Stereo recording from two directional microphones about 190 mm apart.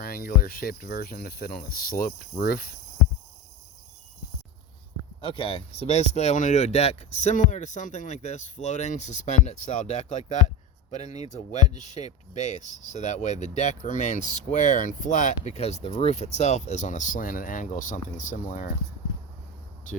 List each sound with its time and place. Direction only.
0.0 s speech: 50° left (ahead or behind)
5.2 s speech: 30° left (ahead or behind)